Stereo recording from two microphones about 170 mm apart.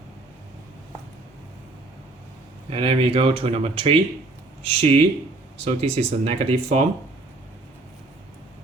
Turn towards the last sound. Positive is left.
turn(degrees=-40)  # may be behind; listen again after turning